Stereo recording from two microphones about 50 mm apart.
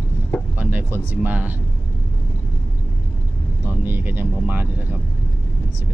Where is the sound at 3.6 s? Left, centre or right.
Right.